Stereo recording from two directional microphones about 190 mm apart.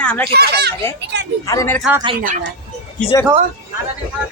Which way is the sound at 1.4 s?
15° left (ahead or behind).